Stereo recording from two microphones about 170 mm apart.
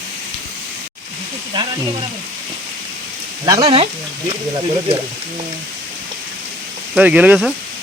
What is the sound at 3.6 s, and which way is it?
Speech, 35° right (ahead or behind).